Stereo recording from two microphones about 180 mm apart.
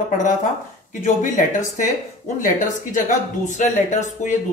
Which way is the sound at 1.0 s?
45° left (ahead or behind).